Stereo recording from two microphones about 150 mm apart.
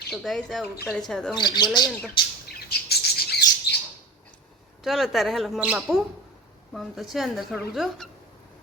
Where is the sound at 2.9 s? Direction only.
90° left.